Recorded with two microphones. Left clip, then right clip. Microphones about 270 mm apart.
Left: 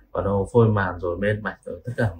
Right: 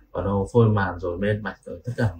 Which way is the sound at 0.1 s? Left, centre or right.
Centre.